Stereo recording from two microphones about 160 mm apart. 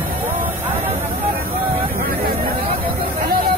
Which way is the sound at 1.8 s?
65° right (ahead or behind).